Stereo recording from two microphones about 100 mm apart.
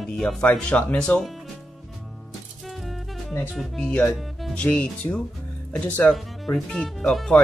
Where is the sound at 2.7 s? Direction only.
Centre (ahead or behind).